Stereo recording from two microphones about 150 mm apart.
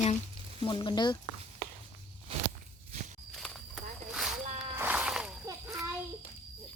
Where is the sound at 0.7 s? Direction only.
30° left (ahead or behind).